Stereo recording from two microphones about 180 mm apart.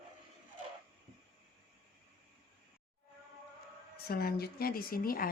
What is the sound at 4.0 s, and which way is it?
Speech, 60° left (ahead or behind).